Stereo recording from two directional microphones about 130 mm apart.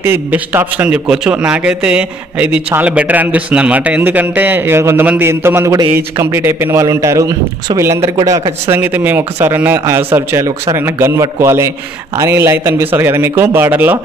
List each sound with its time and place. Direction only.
0.0 s a man's voice: 15° right (ahead or behind)